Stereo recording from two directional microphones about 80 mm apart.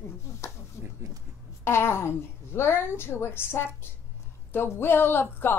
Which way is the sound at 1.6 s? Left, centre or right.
Left.